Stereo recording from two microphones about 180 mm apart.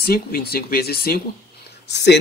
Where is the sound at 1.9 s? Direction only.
70° left (ahead or behind).